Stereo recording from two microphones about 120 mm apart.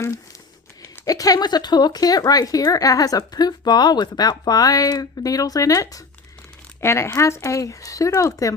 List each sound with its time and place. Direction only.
1.0 s speech: 30° left (ahead or behind)